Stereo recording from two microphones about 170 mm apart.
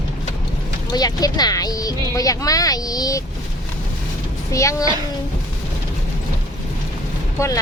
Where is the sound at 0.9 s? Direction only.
20° left (ahead or behind).